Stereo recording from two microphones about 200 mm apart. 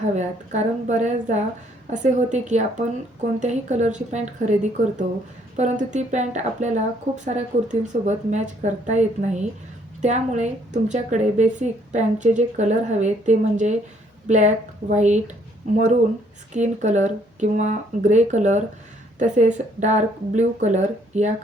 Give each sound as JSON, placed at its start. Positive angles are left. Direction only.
{"t": 0.2, "sound": "a woman's voice", "side_deg": -35}
{"t": 16.5, "sound": "a woman's voice", "side_deg": -35}